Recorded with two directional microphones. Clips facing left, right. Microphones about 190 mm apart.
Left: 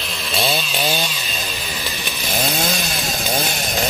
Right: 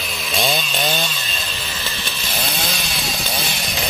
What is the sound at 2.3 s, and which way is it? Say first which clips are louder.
Chainsaw: left 5 dB; 45° left (ahead or behind).